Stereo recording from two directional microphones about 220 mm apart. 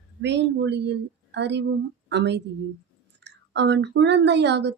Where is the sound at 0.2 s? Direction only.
50° right (ahead or behind).